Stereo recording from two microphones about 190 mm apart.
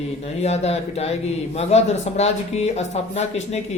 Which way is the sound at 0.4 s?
35° left (ahead or behind).